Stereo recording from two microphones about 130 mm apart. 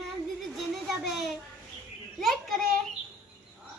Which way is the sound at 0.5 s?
Centre (ahead or behind).